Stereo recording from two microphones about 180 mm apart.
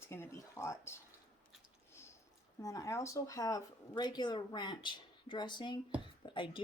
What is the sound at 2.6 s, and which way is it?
Speech, 20° left (ahead or behind).